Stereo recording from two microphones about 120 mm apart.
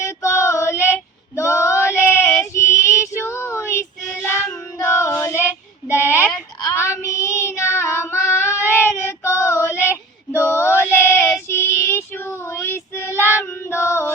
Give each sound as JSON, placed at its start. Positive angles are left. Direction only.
{"t": 0.0, "sound": "female singing", "side_deg": 25}
{"t": 4.8, "sound": "child singing", "side_deg": 25}